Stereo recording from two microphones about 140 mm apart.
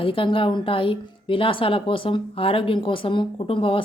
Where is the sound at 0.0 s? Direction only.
40° left (ahead or behind).